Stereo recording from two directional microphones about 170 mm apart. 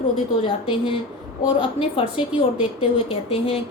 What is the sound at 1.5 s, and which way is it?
A woman's voice, 30° left (ahead or behind).